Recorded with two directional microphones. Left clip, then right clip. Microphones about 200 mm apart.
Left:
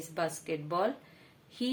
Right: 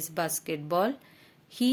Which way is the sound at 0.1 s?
55° right (ahead or behind).